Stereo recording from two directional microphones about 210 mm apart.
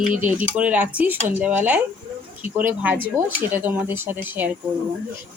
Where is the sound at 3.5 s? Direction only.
10° right (ahead or behind).